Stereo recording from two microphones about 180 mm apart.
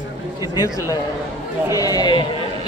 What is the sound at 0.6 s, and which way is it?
A man's voice, 20° left (ahead or behind).